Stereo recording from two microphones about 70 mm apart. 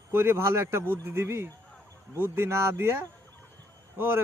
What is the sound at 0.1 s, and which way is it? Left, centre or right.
A man's voice, right.